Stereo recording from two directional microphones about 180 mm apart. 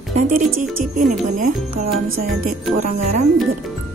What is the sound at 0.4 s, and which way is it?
Speech, 45° right (ahead or behind).